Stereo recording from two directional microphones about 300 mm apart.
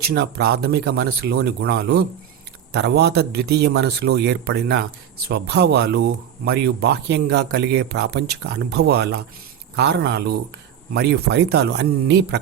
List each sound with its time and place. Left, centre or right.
0.1 s speech: right